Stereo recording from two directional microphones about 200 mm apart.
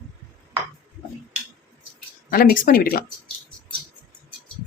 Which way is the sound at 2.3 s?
45° left (ahead or behind).